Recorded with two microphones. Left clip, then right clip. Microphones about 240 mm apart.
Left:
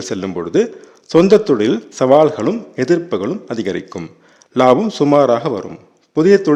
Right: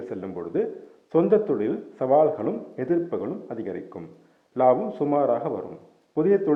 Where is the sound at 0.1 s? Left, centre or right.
Left.